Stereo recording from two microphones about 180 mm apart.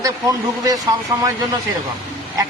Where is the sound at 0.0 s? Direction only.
20° right (ahead or behind).